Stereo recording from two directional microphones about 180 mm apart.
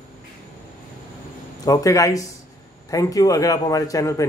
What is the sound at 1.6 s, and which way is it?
Speech, 20° left (ahead or behind).